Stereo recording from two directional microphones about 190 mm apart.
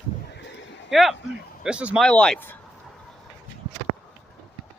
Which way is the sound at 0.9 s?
Centre (ahead or behind).